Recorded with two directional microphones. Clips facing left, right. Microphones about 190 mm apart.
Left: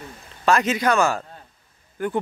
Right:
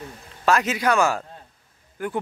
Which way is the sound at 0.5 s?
5° right (ahead or behind).